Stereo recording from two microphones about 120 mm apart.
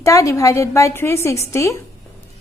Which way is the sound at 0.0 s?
25° left (ahead or behind).